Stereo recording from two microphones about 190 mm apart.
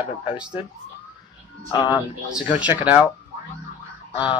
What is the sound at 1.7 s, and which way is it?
Speech, 20° left (ahead or behind).